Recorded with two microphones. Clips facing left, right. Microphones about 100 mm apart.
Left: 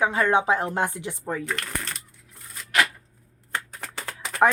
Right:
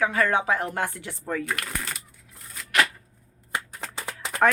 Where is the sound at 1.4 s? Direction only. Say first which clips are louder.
Even; 5° right (ahead or behind).